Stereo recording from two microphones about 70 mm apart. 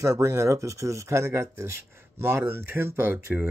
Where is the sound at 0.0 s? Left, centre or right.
Right.